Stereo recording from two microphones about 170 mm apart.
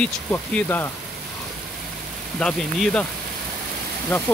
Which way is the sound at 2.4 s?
5° left (ahead or behind).